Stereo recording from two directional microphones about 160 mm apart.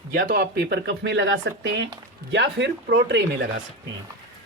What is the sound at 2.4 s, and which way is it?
Speech, 90° right.